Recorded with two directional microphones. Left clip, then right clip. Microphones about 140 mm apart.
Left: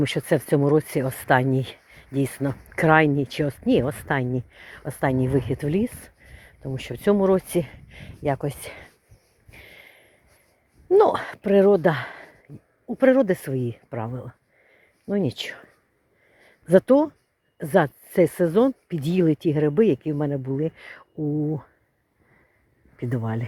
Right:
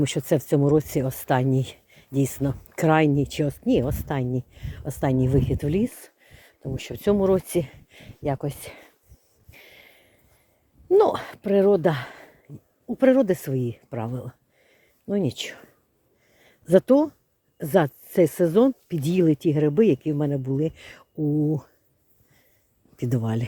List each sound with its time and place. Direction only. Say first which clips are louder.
0.0 s speech: left 1 dB; 25° right (ahead or behind)
6.7 s speech: left 1 dB; 20° right (ahead or behind)
9.5 s snort: left 3 dB; 25° right (ahead or behind)
10.8 s speech: left 1 dB; 20° right (ahead or behind)
11.4 s speech: left 2 dB; 5° right (ahead or behind)
11.7 s speech: left 1 dB; 30° right (ahead or behind); by 14.8 s 45° right (ahead or behind)
15.0 s speech: left 1 dB; 30° right (ahead or behind)
16.4 s a sound: left 1 dB; 30° right (ahead or behind)
17.6 s speech: left 1 dB; 40° right (ahead or behind)
21.2 s speech: right 2 dB; 25° right (ahead or behind)
23.0 s speech: right 1 dB; 50° right (ahead or behind)